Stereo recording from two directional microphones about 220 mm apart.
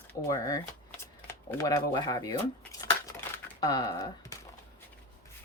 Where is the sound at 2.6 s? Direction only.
15° left (ahead or behind).